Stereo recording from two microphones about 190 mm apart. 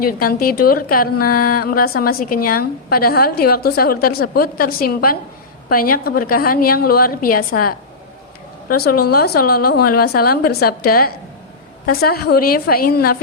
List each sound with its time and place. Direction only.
0.0 s a woman's voice: 50° left (ahead or behind)